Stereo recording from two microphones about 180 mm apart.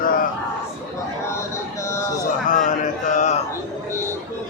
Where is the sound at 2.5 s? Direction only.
45° left (ahead or behind).